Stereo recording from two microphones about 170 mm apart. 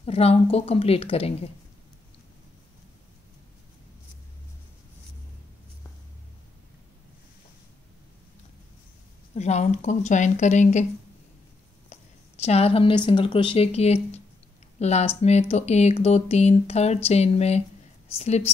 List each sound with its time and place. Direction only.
0.0 s speech: 35° left (ahead or behind)
9.3 s speech: 40° left (ahead or behind)
11.9 s speech: 40° left (ahead or behind)